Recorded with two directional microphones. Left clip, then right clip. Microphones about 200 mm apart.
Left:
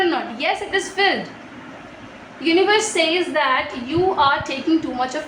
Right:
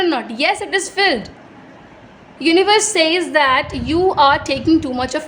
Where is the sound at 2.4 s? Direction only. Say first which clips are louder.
Right 3 dB; 60° right (ahead or behind).